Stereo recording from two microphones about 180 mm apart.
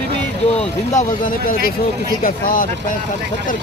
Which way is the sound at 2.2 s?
50° left (ahead or behind).